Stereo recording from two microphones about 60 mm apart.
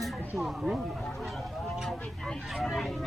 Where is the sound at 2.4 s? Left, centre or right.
Centre.